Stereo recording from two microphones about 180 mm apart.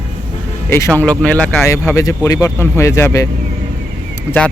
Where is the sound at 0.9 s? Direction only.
5° left (ahead or behind).